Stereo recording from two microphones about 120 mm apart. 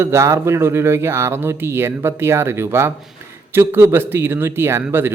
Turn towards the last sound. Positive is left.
turn(degrees=-20)  # may be behind; listen again after turning